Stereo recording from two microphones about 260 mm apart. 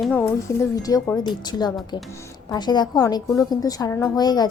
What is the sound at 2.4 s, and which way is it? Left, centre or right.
A woman's voice, centre.